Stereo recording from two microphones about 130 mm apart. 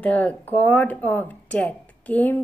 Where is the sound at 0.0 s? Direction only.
10° left (ahead or behind).